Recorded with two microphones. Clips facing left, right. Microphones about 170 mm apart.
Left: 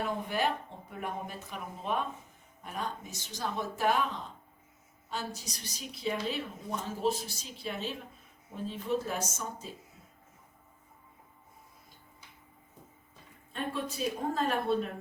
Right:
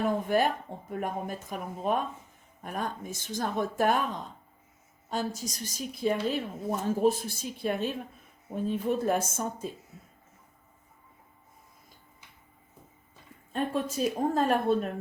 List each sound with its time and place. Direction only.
0.3 s a woman's voice: 45° right (ahead or behind)
5.1 s a woman's voice: 45° right (ahead or behind)
13.5 s a woman's voice: 45° right (ahead or behind)